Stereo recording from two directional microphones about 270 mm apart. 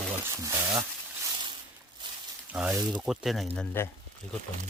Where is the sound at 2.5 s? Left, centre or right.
Centre.